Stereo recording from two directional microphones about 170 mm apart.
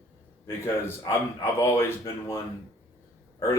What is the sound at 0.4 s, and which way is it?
A man's voice, 15° left (ahead or behind).